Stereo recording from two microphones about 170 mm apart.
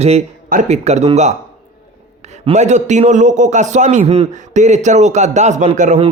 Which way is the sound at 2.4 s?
40° right (ahead or behind).